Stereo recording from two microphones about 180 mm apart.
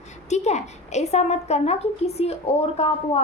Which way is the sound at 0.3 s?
40° left (ahead or behind).